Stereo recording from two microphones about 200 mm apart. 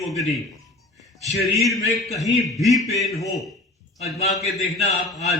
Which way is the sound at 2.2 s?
Centre (ahead or behind).